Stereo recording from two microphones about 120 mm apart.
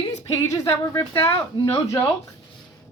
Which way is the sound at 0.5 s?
25° left (ahead or behind).